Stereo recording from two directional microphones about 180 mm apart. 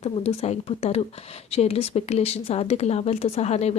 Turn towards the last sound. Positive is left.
turn(degrees=35)  # may be behind; listen again after turning